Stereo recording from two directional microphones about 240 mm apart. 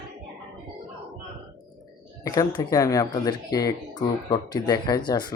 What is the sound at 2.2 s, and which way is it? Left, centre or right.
Speech, centre.